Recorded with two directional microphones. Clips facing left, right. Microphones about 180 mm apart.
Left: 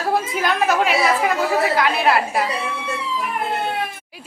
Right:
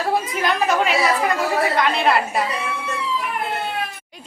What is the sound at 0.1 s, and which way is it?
Speech, centre (ahead or behind).